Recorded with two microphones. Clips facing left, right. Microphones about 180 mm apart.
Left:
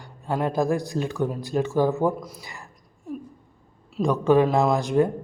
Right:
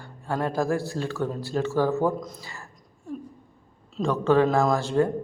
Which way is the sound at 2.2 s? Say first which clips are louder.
Right 2 dB; 5° left (ahead or behind).